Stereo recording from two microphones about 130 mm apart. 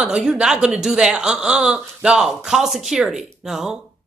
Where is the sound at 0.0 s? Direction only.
5° right (ahead or behind).